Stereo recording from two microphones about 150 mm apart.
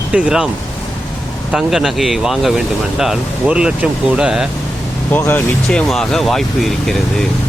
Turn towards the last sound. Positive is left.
turn(degrees=5)  # may be behind; listen again after turning